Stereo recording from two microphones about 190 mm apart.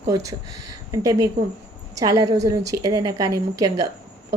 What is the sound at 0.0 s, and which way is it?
A woman's voice, 15° right (ahead or behind).